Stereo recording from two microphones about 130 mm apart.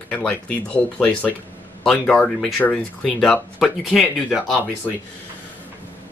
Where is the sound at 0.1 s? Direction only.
10° left (ahead or behind).